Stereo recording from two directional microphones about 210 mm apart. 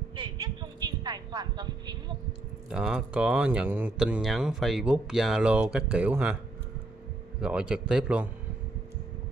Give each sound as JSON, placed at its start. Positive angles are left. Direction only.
{"t": 0.1, "sound": "a sound", "side_deg": -25}
{"t": 2.7, "sound": "speech", "side_deg": 0}
{"t": 7.3, "sound": "speech", "side_deg": -5}